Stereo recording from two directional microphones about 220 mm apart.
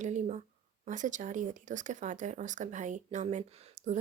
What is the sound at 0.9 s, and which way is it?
Speech, 35° right (ahead or behind).